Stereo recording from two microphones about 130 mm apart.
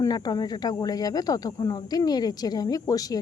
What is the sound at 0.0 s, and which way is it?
Speech, 30° left (ahead or behind).